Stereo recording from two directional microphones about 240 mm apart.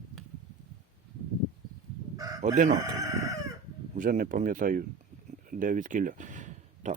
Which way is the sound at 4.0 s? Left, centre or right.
Right.